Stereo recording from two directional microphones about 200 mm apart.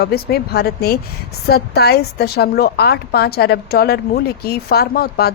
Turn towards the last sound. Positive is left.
turn(degrees=50)  # may be behind; listen again after turning